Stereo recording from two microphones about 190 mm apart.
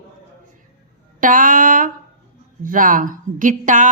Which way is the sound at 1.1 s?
45° right (ahead or behind).